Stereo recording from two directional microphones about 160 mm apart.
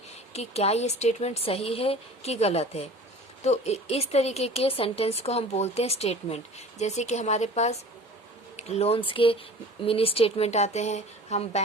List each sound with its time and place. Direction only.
0.3 s a woman's voice: 40° left (ahead or behind)